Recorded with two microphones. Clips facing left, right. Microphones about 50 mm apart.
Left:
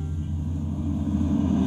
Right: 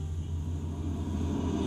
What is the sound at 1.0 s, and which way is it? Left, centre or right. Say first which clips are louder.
Vehicle: left 9 dB; centre.